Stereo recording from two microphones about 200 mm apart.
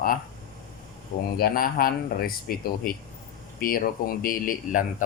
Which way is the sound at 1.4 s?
50° left (ahead or behind).